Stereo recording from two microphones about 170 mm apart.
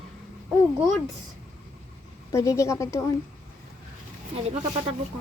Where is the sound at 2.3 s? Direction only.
15° left (ahead or behind).